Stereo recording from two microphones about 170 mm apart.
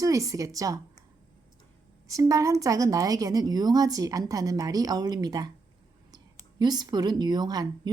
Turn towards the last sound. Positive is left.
turn(degrees=-25)  # may be behind; listen again after turning